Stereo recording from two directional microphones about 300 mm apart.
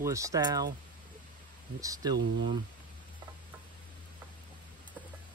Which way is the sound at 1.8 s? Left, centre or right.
Centre.